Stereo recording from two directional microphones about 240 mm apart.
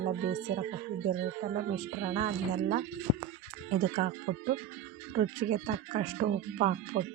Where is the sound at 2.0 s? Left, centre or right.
Right.